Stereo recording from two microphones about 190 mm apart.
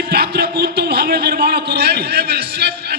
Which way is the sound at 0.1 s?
55° right (ahead or behind).